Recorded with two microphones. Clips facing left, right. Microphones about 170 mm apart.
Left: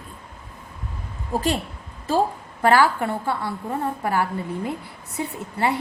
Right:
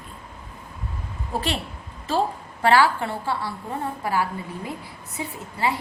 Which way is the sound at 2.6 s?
45° left (ahead or behind).